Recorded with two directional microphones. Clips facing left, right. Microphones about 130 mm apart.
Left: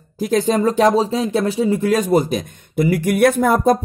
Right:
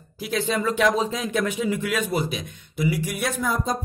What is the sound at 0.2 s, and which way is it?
Speech, 45° left (ahead or behind).